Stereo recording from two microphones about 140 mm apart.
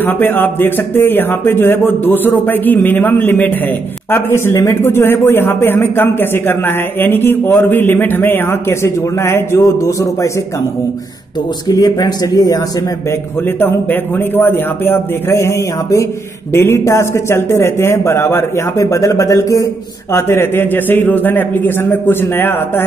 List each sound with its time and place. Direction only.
0.0 s speech: 15° left (ahead or behind)
11.6 s speech: 25° left (ahead or behind)
13.6 s speech: 15° left (ahead or behind)